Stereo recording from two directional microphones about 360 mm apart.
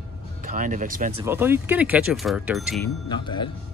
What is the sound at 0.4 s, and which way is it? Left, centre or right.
Speech, right.